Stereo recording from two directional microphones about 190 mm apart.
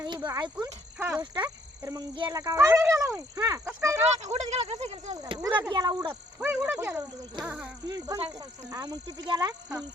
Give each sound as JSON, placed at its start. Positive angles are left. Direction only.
{"t": 0.0, "sound": "cricket", "side_deg": -20}
{"t": 0.9, "sound": "speech", "side_deg": -10}
{"t": 1.2, "sound": "speech", "side_deg": -20}
{"t": 4.2, "sound": "speech", "side_deg": -35}
{"t": 5.1, "sound": "speech", "side_deg": -20}
{"t": 7.9, "sound": "speech", "side_deg": -20}